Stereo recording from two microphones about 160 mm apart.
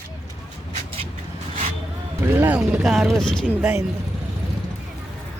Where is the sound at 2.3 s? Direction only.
15° right (ahead or behind); by 3.5 s 5° left (ahead or behind).